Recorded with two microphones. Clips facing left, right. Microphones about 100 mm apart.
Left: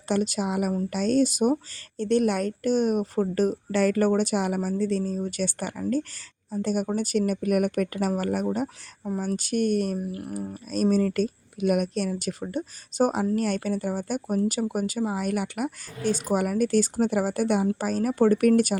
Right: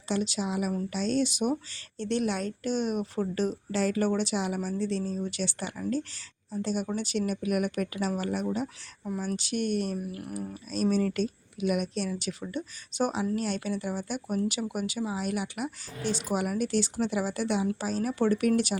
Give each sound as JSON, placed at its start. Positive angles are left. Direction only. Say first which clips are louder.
{"t": 0.1, "sound": "speech", "louder": "left 4 dB", "side_deg": 50}
{"t": 10.0, "sound": "speech", "louder": "left 4 dB", "side_deg": 30}
{"t": 10.5, "sound": "speech", "louder": "left 4 dB", "side_deg": 50}